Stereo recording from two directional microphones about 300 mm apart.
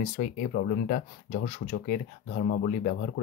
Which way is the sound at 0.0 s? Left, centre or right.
Left.